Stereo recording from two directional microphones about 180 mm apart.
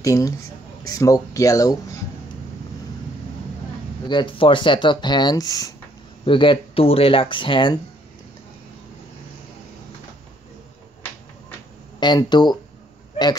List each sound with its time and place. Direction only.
0.0 s speech: 20° left (ahead or behind)
4.1 s speech: 25° left (ahead or behind)
12.0 s speech: 25° left (ahead or behind)